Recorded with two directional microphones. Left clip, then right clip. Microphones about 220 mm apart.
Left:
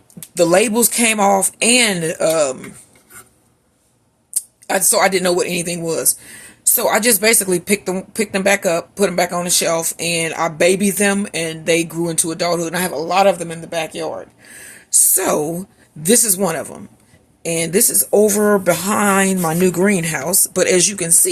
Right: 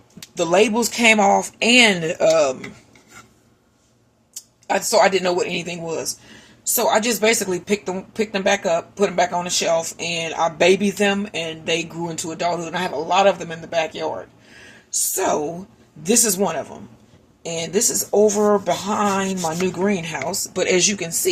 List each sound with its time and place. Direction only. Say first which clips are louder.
0.3 s speech: left 3 dB; 35° left (ahead or behind); by 2.6 s 15° left (ahead or behind)
4.4 s a sound: left 2 dB; 35° left (ahead or behind)
4.9 s speech: left 1 dB; 30° left (ahead or behind)
14.8 s speech: left 3 dB; 45° left (ahead or behind)
17.4 s speech: left 4 dB; 55° left (ahead or behind); by 21.1 s 35° left (ahead or behind)